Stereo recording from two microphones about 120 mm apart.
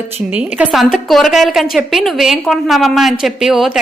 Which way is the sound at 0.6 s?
5° right (ahead or behind).